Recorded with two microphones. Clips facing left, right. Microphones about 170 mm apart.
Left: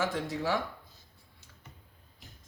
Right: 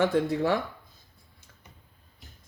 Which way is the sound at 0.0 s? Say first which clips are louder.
Right 8 dB; 60° right (ahead or behind).